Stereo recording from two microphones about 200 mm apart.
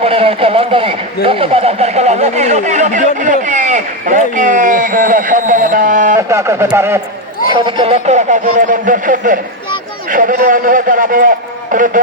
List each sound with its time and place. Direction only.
0.0 s a man's voice: 30° right (ahead or behind)
6.1 s a man's voice: 15° right (ahead or behind)
7.5 s a man's voice: 25° right (ahead or behind); by 11.9 s 40° right (ahead or behind)